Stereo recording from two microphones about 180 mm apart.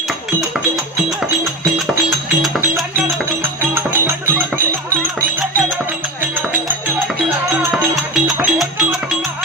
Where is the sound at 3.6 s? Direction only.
10° right (ahead or behind).